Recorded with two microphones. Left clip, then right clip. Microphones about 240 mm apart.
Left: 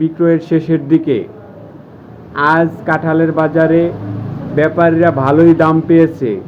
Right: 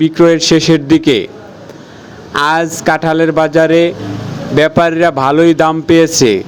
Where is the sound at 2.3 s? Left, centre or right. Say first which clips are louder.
Even; right.